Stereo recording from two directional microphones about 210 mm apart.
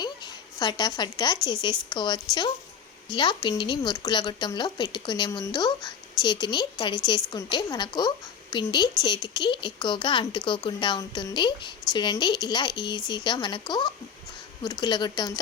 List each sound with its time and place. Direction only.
0.0 s a woman's voice: 20° left (ahead or behind)